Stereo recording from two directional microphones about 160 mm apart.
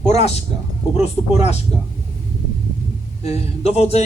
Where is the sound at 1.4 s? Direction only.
40° left (ahead or behind).